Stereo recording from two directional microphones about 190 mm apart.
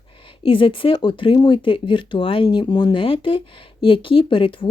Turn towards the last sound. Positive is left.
turn(degrees=25)  # may be behind; listen again after turning